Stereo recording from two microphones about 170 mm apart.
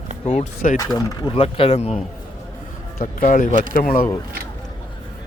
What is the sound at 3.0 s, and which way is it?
Speech, 55° left (ahead or behind).